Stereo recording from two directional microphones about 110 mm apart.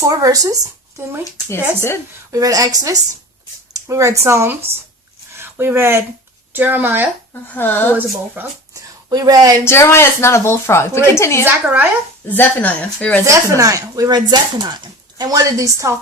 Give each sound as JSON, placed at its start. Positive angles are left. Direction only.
{"t": 0.0, "sound": "speech", "side_deg": -30}
{"t": 1.0, "sound": "speech", "side_deg": -25}
{"t": 2.3, "sound": "speech", "side_deg": -35}
{"t": 7.5, "sound": "a woman's voice", "side_deg": 15}
{"t": 8.4, "sound": "speech", "side_deg": -20}
{"t": 8.7, "sound": "a sound", "side_deg": -35}
{"t": 9.6, "sound": "a woman's voice", "side_deg": 25}
{"t": 11.4, "sound": "speech", "side_deg": -15}
{"t": 12.3, "sound": "a woman's voice", "side_deg": 15}
{"t": 13.2, "sound": "speech", "side_deg": -30}